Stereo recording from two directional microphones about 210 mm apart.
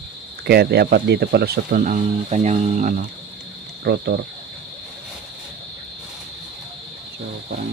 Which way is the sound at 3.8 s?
50° right (ahead or behind).